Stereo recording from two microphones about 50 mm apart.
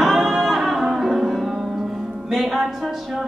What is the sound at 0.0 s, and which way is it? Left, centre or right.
Music, centre.